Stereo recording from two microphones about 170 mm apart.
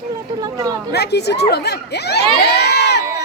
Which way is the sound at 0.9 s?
75° left (ahead or behind).